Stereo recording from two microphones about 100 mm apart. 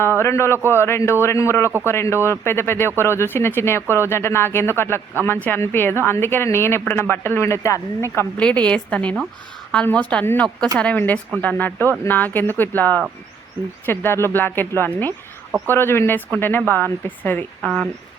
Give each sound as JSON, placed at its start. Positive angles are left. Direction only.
{"t": 0.2, "sound": "a man's voice", "side_deg": 25}
{"t": 8.4, "sound": "a woman's voice", "side_deg": 10}